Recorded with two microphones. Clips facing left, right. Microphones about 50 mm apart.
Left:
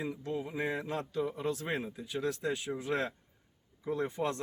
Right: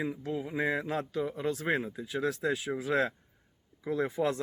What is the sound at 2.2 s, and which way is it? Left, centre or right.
Speech, right.